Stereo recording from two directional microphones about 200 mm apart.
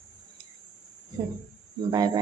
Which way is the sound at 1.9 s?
20° right (ahead or behind).